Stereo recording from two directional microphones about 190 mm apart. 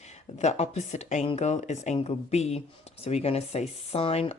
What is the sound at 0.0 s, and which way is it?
Speech, 35° left (ahead or behind).